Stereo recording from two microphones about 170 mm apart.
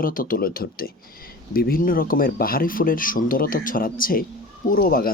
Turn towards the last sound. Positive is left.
turn(degrees=60)  # may be behind; listen again after turning